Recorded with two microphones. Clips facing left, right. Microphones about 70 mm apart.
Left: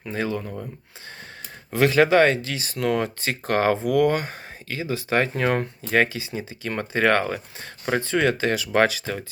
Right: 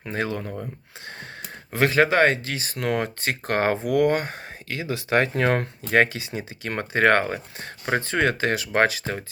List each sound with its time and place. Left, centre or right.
0.0 s speech: right
1.7 s speech: right